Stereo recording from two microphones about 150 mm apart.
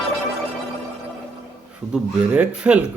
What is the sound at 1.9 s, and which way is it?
Speech, 10° right (ahead or behind).